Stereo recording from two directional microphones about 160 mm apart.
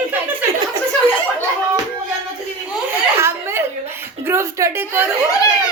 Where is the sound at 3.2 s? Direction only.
15° right (ahead or behind).